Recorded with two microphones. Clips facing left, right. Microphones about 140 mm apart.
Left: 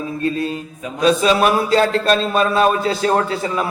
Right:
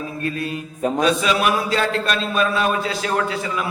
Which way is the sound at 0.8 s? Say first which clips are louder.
Right 8 dB; 50° right (ahead or behind).